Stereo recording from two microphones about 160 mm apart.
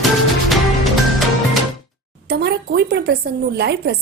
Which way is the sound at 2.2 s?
90° right.